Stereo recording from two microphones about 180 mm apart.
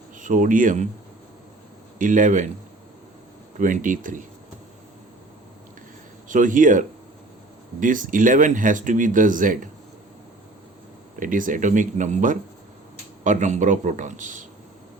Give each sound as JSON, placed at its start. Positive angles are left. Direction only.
{"t": 0.2, "sound": "speech", "side_deg": -45}
{"t": 2.0, "sound": "speech", "side_deg": -45}
{"t": 3.6, "sound": "speech", "side_deg": -45}
{"t": 6.2, "sound": "speech", "side_deg": -45}
{"t": 11.2, "sound": "speech", "side_deg": -50}